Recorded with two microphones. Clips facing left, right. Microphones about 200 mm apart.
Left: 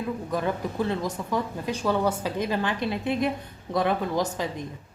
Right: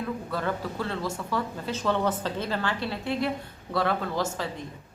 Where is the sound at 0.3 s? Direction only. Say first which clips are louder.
Left 3 dB; 15° left (ahead or behind).